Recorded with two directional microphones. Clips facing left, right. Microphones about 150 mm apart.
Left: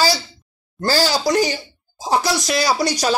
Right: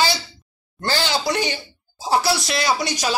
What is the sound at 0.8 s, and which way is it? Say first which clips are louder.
Speech: left 4 dB; 35° left (ahead or behind).